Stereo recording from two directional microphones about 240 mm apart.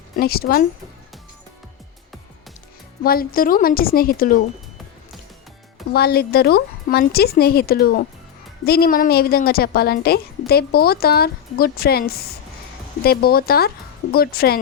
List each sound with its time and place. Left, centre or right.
0.2 s a woman's voice: left
3.0 s a woman's voice: left
5.9 s a woman's voice: left